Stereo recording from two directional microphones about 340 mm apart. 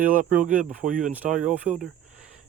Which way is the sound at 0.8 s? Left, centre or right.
Right.